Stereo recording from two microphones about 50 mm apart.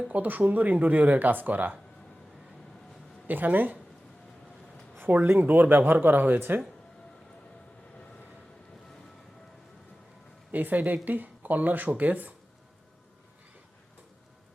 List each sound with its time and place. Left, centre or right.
0.1 s speech: right
3.2 s speech: right
4.9 s speech: right
10.5 s speech: right